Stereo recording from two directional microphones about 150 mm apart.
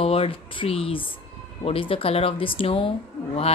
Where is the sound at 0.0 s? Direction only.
40° left (ahead or behind).